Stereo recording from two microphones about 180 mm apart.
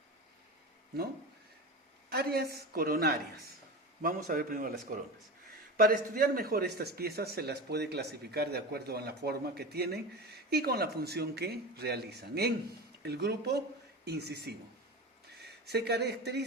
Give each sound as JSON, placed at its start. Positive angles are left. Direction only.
{"t": 2.0, "sound": "speech", "side_deg": -60}